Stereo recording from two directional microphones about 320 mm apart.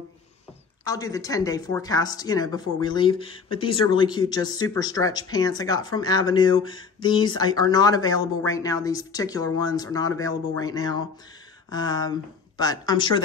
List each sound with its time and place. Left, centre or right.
0.8 s speech: centre